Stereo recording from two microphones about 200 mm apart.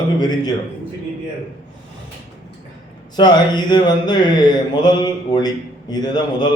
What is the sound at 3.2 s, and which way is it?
A man's voice, 20° left (ahead or behind).